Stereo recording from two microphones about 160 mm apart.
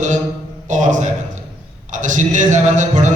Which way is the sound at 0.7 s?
50° right (ahead or behind).